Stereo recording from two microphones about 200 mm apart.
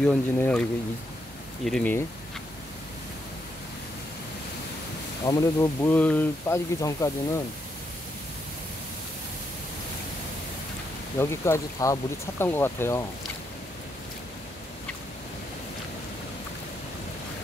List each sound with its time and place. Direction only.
0.0 s speech: 5° left (ahead or behind)
5.2 s speech: 15° left (ahead or behind)
11.1 s speech: 10° left (ahead or behind)